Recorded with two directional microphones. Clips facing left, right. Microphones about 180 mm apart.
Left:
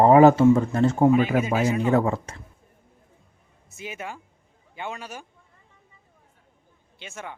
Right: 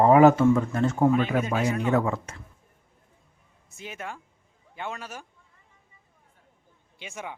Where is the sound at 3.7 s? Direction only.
5° left (ahead or behind).